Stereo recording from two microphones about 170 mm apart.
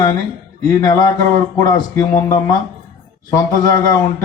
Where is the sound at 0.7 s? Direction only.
25° left (ahead or behind).